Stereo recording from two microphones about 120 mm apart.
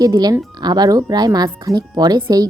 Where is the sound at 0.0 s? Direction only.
30° right (ahead or behind).